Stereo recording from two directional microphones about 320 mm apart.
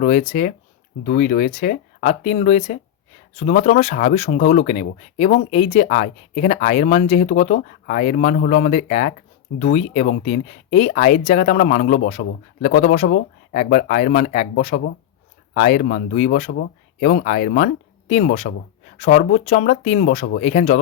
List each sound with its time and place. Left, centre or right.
0.0 s speech: left